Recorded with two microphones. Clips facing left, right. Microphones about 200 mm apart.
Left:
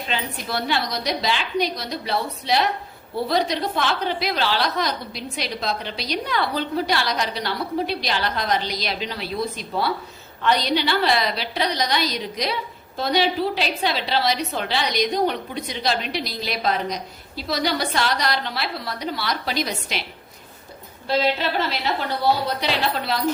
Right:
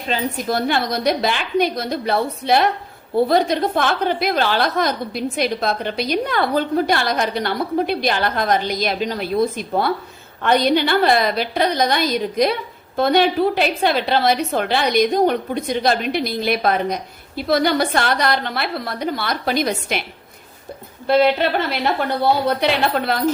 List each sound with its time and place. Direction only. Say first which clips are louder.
0.1 s a woman's voice: right 7 dB; 45° right (ahead or behind)
21.1 s a woman's voice: right 6 dB; 55° right (ahead or behind)